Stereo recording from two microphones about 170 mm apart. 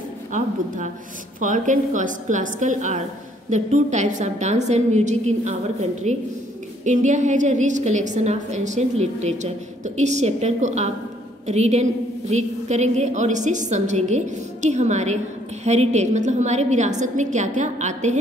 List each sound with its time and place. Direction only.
0.3 s a woman's voice: 45° right (ahead or behind)